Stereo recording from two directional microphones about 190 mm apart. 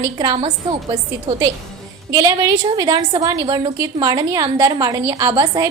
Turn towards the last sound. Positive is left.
turn(degrees=-20)  # may be behind; listen again after turning